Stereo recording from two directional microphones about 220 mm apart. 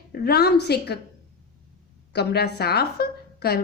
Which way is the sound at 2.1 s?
50° left (ahead or behind).